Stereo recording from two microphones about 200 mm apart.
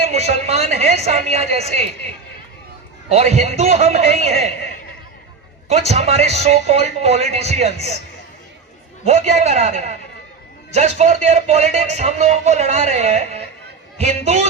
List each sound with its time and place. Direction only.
0.0 s speech: 35° right (ahead or behind)
3.1 s speech: 35° right (ahead or behind)
5.9 s speech: 30° right (ahead or behind)
9.0 s speech: 35° right (ahead or behind)